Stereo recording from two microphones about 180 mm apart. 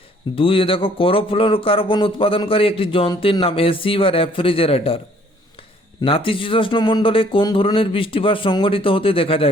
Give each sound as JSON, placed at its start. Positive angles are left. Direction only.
{"t": 0.3, "sound": "speech", "side_deg": 30}